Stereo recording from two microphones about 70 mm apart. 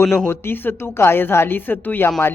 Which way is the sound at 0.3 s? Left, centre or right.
Left.